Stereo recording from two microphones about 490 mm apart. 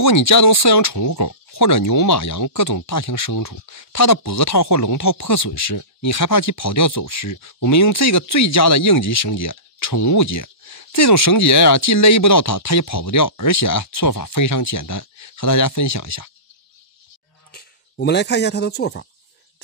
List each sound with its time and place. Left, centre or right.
0.0 s speech: left
17.5 s speech: centre